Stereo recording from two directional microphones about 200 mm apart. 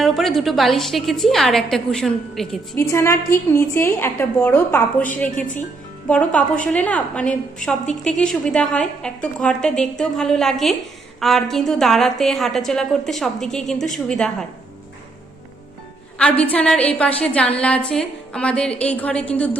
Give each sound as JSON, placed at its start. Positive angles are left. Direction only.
{"t": 0.0, "sound": "a woman's voice", "side_deg": 0}
{"t": 2.9, "sound": "a woman's voice", "side_deg": 15}
{"t": 5.3, "sound": "a woman's voice", "side_deg": 40}
{"t": 6.1, "sound": "a woman's voice", "side_deg": 5}
{"t": 16.1, "sound": "a woman's voice", "side_deg": 5}